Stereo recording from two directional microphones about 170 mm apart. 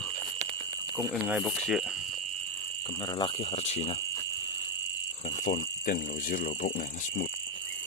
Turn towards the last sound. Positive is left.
turn(degrees=50)  # may be behind; listen again after turning